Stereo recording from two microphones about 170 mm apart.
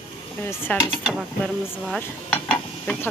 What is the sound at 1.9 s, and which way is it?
Stir, 5° left (ahead or behind).